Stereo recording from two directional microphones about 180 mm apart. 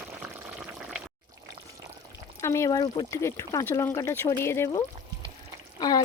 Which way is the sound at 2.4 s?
15° left (ahead or behind).